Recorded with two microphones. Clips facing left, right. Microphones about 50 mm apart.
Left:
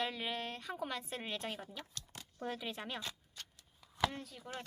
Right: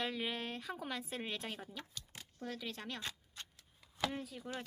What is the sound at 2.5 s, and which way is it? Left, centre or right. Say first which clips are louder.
Speech: left 2 dB; centre.